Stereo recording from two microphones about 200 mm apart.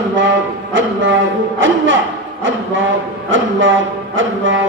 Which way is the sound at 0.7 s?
70° right (ahead or behind).